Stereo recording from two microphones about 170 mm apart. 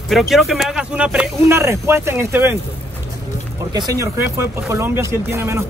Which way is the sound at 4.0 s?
15° right (ahead or behind).